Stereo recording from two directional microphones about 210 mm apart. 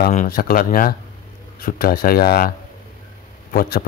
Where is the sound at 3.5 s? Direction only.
45° left (ahead or behind).